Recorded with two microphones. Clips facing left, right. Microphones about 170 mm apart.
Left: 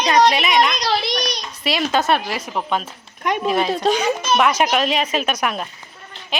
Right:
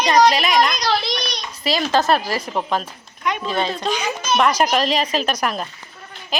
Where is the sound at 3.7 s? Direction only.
35° left (ahead or behind).